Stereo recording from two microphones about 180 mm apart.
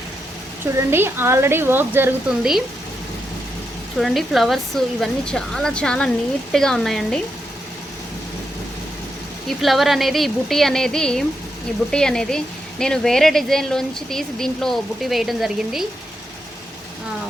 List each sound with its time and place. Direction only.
0.6 s a woman's voice: 15° right (ahead or behind)
3.9 s speech: centre (ahead or behind)
9.5 s speech: centre (ahead or behind)